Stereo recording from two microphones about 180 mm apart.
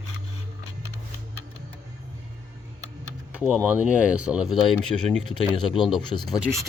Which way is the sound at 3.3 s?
5° right (ahead or behind).